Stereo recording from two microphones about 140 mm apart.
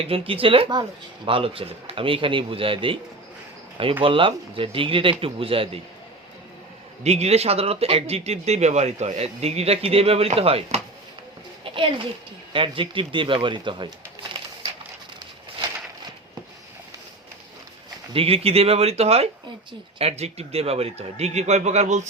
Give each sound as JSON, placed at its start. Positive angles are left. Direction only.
{"t": 0.0, "sound": "speech", "side_deg": -40}
{"t": 4.0, "sound": "speech", "side_deg": -40}
{"t": 7.0, "sound": "speech", "side_deg": -50}
{"t": 11.6, "sound": "a sound", "side_deg": -40}
{"t": 12.5, "sound": "speech", "side_deg": -35}
{"t": 18.1, "sound": "speech", "side_deg": -40}